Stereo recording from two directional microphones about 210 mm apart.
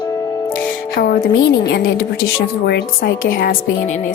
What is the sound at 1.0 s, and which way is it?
A woman's voice, 45° left (ahead or behind).